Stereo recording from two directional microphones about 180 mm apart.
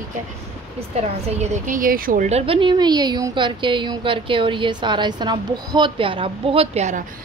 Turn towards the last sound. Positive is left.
turn(degrees=-40)  # may be behind; listen again after turning